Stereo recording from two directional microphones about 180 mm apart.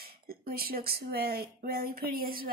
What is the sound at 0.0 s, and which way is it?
Speech, 55° right (ahead or behind).